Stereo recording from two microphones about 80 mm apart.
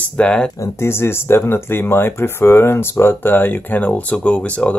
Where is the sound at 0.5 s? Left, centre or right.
Left.